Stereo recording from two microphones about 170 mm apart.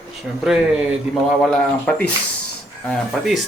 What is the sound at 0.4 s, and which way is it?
Speech, 5° right (ahead or behind).